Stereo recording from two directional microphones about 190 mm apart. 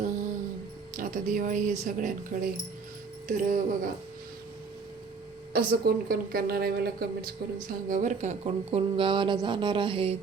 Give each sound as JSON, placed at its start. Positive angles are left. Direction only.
{"t": 0.9, "sound": "speech", "side_deg": -45}
{"t": 5.5, "sound": "speech", "side_deg": -50}